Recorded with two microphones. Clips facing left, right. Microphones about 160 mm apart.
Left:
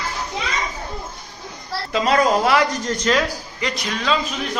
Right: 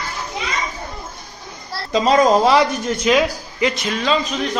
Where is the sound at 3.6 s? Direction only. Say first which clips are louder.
Right 5 dB; centre (ahead or behind).